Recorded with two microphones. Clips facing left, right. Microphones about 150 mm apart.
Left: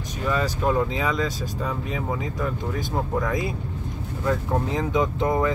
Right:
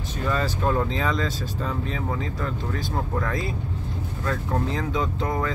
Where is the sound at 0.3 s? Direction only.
10° left (ahead or behind).